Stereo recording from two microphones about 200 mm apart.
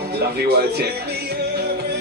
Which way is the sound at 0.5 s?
55° right (ahead or behind).